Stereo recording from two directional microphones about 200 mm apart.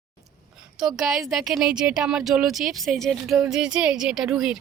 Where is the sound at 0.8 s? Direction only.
Centre (ahead or behind).